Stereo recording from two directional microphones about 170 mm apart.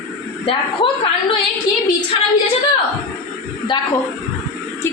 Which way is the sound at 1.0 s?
30° left (ahead or behind).